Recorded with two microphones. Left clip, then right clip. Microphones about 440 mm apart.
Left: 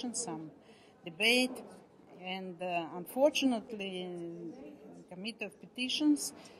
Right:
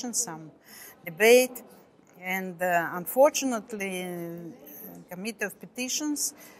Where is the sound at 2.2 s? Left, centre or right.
Right.